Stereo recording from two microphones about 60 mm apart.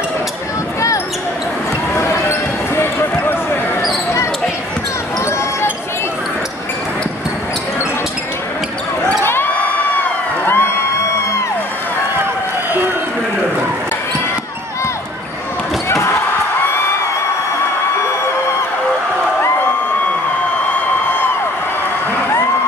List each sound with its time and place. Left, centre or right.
2.0 s basketball bounce: left
9.2 s a sound: left
9.9 s crowd: left